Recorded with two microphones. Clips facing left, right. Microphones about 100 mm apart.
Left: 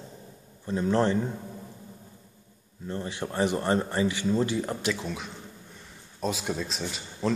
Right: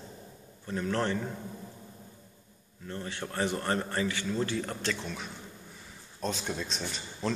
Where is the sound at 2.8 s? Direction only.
20° left (ahead or behind).